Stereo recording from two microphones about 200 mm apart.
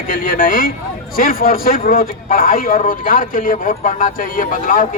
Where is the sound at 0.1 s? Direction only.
45° left (ahead or behind).